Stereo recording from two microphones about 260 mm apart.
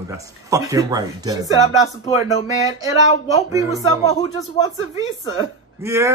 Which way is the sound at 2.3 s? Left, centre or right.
Left.